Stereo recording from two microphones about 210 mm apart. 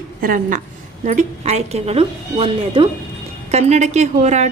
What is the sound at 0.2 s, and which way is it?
A woman's voice, 40° right (ahead or behind).